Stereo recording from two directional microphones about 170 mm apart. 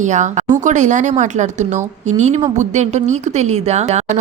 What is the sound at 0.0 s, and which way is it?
A woman's voice, 45° right (ahead or behind).